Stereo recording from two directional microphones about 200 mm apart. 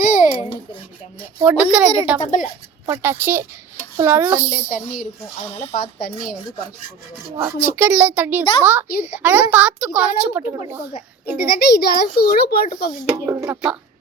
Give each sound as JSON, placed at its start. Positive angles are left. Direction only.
{"t": 0.0, "sound": "babbling", "side_deg": 40}
{"t": 1.4, "sound": "a woman's voice", "side_deg": -5}
{"t": 2.2, "sound": "speech", "side_deg": 40}
{"t": 2.8, "sound": "a woman's voice", "side_deg": -10}
{"t": 5.5, "sound": "speech", "side_deg": 30}
{"t": 7.3, "sound": "a woman's voice", "side_deg": -10}
{"t": 11.5, "sound": "a child's voice", "side_deg": 50}
{"t": 13.1, "sound": "a woman's voice", "side_deg": -15}